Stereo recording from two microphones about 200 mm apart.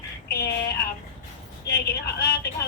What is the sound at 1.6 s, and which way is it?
Speech, 55° left (ahead or behind).